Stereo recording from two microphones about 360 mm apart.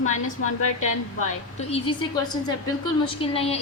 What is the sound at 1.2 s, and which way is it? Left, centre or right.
Speech, centre.